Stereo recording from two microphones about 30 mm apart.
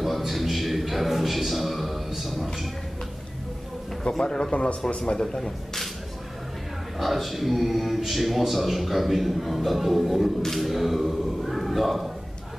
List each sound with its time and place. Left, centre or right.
0.0 s a sound: centre
4.2 s a man's voice: left
4.5 s a man's voice: left
4.8 s a man's voice: left
5.2 s speech: centre
7.0 s speech: centre